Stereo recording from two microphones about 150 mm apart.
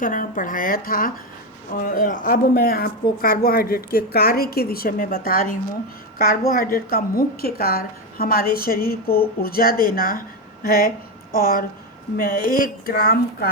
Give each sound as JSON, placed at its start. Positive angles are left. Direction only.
{"t": 0.0, "sound": "a woman's voice", "side_deg": 65}